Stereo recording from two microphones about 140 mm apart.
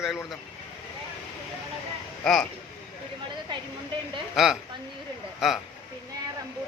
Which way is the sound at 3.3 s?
35° right (ahead or behind).